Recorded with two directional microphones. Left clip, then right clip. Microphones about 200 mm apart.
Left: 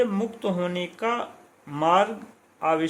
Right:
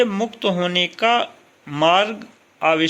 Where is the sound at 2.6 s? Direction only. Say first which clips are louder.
Right 6 dB; 15° right (ahead or behind).